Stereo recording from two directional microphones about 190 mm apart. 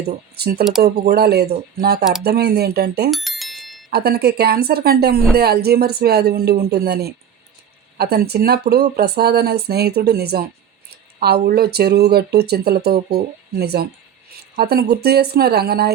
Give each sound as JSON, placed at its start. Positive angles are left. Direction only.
{"t": 0.3, "sound": "speech", "side_deg": -55}
{"t": 3.1, "sound": "bicycle bell", "side_deg": 0}
{"t": 3.8, "sound": "speech", "side_deg": -55}